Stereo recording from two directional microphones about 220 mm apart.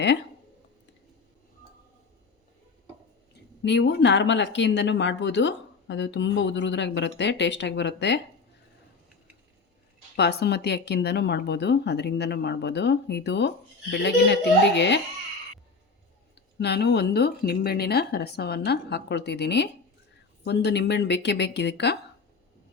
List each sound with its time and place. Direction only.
3.6 s speech: 50° left (ahead or behind)
10.2 s speech: 50° left (ahead or behind)
16.6 s speech: 50° left (ahead or behind)